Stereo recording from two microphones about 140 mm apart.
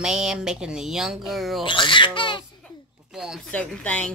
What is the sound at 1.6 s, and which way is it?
Speech, 35° left (ahead or behind).